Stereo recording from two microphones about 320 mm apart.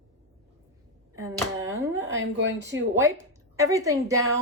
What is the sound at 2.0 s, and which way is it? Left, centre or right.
Speech, right.